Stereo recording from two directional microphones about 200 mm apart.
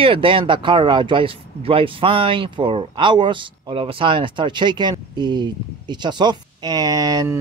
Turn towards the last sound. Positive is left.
turn(degrees=-20)  # may be behind; listen again after turning